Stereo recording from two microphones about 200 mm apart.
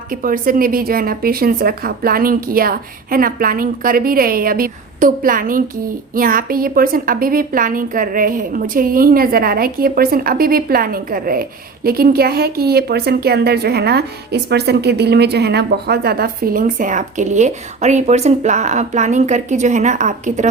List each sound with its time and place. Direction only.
0.1 s a woman's voice: 45° right (ahead or behind)